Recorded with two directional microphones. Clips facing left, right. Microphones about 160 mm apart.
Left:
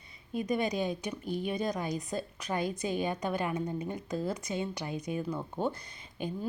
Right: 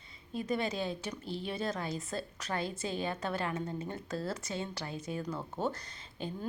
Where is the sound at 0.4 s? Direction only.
15° left (ahead or behind).